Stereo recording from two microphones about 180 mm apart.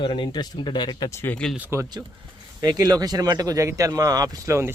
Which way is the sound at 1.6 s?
15° right (ahead or behind).